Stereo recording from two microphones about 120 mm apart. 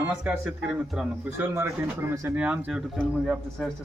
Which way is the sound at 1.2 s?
15° right (ahead or behind).